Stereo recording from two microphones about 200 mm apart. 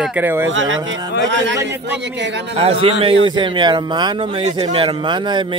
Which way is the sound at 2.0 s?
60° right (ahead or behind).